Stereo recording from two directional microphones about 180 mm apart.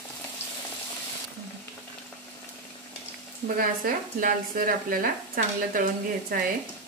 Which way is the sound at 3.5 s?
50° right (ahead or behind).